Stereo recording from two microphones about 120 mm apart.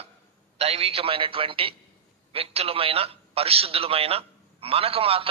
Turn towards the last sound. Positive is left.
turn(degrees=-55)  # may be behind; listen again after turning